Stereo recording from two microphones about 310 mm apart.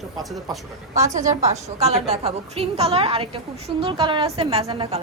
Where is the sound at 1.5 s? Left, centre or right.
Right.